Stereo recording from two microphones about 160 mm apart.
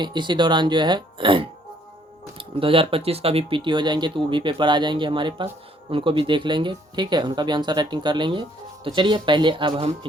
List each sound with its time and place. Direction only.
0.0 s speech: 30° right (ahead or behind)